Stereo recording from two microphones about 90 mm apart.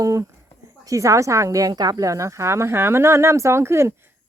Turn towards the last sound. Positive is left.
turn(degrees=-30)  # may be behind; listen again after turning